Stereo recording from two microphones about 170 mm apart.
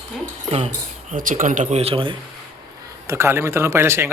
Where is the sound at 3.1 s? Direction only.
15° right (ahead or behind).